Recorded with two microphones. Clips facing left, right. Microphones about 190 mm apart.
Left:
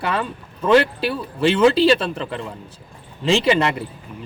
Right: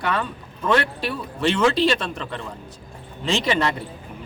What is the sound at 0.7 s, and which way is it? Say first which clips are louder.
Speech: left 8 dB; 30° left (ahead or behind).